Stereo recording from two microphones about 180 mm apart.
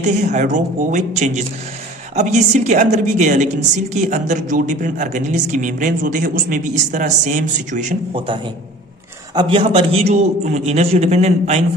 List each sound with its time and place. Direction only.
0.0 s a man's voice: 40° right (ahead or behind)
9.3 s a man's voice: 25° right (ahead or behind)